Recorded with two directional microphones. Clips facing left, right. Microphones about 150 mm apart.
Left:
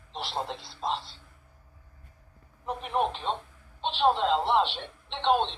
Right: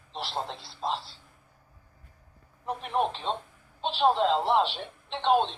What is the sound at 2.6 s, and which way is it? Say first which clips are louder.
A man's voice: even; centre (ahead or behind).